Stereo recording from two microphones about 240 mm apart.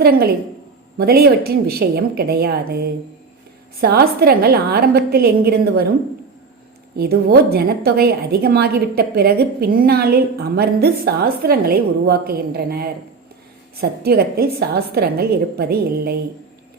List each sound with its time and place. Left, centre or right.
0.0 s a woman's voice: right
6.9 s a woman's voice: right
14.0 s a woman's voice: right